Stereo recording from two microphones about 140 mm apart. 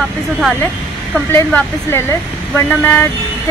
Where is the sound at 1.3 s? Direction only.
20° left (ahead or behind).